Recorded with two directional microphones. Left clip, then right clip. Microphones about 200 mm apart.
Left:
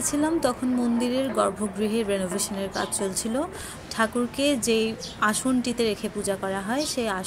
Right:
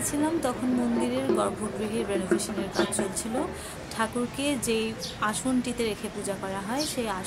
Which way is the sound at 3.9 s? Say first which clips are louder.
Left 4 dB; 20° left (ahead or behind).